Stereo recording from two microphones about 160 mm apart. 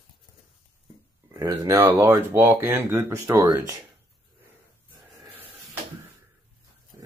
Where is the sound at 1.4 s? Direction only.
20° right (ahead or behind).